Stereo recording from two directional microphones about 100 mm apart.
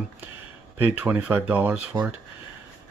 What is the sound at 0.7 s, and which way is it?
Speech, 15° right (ahead or behind).